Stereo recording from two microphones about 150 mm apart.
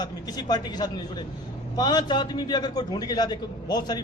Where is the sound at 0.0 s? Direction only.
25° left (ahead or behind).